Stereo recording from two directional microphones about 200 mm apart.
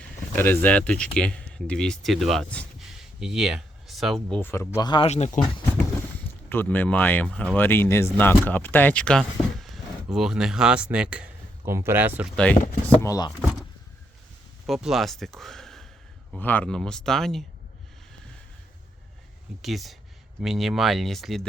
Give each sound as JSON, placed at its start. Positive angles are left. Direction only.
{"t": 0.3, "sound": "speech", "side_deg": 10}
{"t": 6.5, "sound": "speech", "side_deg": 10}
{"t": 13.0, "sound": "speech", "side_deg": 20}
{"t": 14.7, "sound": "speech", "side_deg": 0}
{"t": 19.6, "sound": "speech", "side_deg": 0}